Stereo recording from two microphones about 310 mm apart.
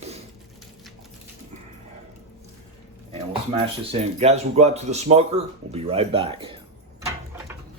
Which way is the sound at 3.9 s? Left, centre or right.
Right.